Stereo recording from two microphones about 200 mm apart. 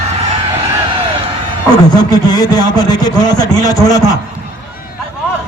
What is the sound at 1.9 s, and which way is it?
A man's voice, 20° left (ahead or behind).